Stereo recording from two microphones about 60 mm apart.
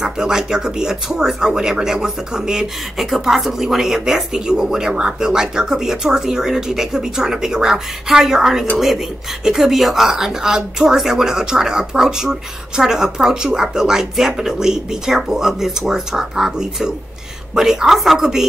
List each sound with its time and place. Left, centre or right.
0.0 s speech: centre